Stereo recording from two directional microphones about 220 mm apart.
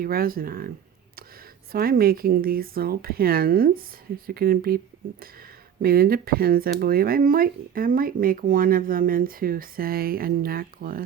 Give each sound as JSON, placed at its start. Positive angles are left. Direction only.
{"t": 0.0, "sound": "speech", "side_deg": -40}
{"t": 1.7, "sound": "speech", "side_deg": -40}
{"t": 5.8, "sound": "speech", "side_deg": -45}